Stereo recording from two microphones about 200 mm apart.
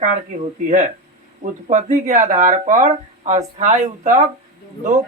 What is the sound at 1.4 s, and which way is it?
Speech, 35° right (ahead or behind).